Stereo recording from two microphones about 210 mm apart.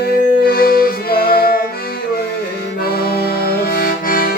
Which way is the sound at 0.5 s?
45° left (ahead or behind).